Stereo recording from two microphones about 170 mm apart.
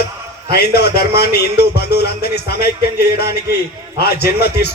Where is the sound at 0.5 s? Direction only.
70° left (ahead or behind).